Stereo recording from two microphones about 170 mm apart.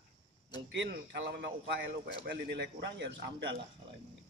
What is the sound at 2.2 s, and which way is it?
A man's voice, 80° right.